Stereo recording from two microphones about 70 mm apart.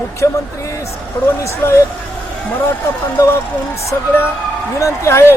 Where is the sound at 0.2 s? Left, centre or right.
Left.